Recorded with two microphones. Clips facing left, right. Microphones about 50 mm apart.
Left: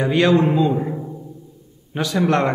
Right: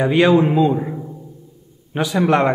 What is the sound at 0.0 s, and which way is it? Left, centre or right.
A man's voice, centre.